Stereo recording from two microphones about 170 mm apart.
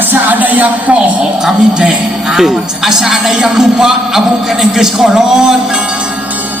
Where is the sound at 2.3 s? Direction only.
Centre (ahead or behind).